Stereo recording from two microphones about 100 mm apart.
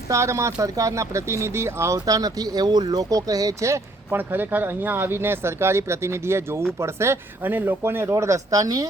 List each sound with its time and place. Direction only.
0.1 s speech: 30° right (ahead or behind)